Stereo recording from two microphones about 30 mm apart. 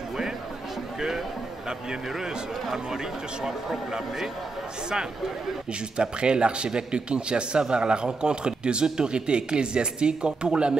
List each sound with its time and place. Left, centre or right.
0.9 s speech: centre
3.4 s speech: centre; by 10.8 s right